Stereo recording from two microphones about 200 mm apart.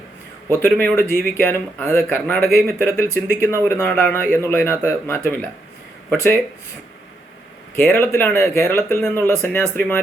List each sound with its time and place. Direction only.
0.5 s speech: 10° left (ahead or behind)
7.8 s speech: 10° left (ahead or behind)